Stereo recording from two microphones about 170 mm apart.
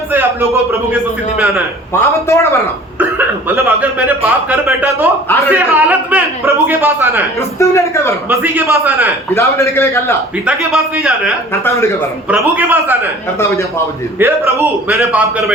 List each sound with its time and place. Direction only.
0.1 s speech: 10° right (ahead or behind)
1.9 s a man's voice: 15° left (ahead or behind)
3.0 s speech: 10° right (ahead or behind)
7.3 s a man's voice: 15° left (ahead or behind)
8.3 s speech: 15° right (ahead or behind)
9.3 s a man's voice: 15° left (ahead or behind)
10.4 s a man's voice: 5° right (ahead or behind)
11.5 s a man's voice: 15° left (ahead or behind)
12.3 s speech: 10° right (ahead or behind)
13.4 s a man's voice: 15° left (ahead or behind)
14.2 s speech: 15° right (ahead or behind)